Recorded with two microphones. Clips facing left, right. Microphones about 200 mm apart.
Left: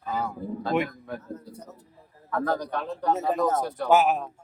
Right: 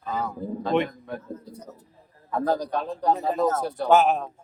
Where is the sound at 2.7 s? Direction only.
35° right (ahead or behind).